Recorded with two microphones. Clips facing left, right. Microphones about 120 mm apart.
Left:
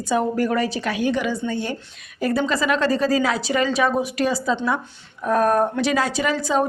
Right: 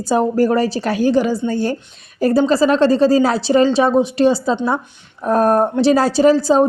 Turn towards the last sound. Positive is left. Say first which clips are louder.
# right 9 dB
turn(degrees=-35)  # may be behind; listen again after turning